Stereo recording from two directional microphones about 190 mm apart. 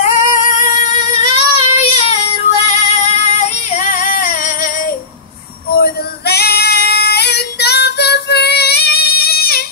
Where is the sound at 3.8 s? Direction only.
45° left (ahead or behind).